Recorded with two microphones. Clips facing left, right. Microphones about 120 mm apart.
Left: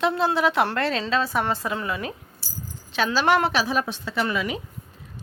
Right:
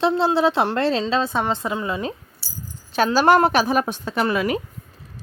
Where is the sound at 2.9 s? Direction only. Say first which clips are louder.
Right 5 dB; 45° right (ahead or behind).